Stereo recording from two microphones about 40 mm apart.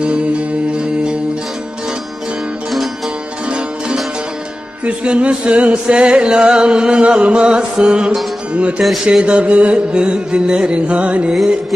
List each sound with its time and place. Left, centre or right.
0.0 s music: right
4.8 s music: right
10.9 s music: right